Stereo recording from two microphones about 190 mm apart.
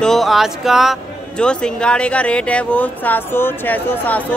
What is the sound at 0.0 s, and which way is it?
Speech, centre (ahead or behind).